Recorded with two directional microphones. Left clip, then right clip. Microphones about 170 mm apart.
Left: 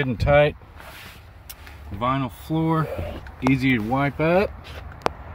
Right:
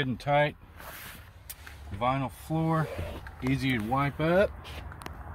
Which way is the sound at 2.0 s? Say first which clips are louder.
Left 5 dB; 10° left (ahead or behind).